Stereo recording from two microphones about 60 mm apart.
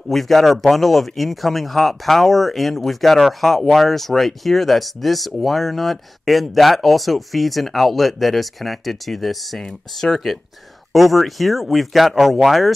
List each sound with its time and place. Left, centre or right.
0.1 s speech: centre